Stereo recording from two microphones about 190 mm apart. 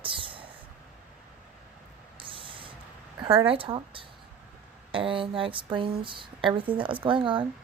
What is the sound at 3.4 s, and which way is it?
Speech, 30° right (ahead or behind).